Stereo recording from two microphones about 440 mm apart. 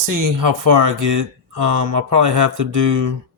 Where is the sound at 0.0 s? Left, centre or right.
Right.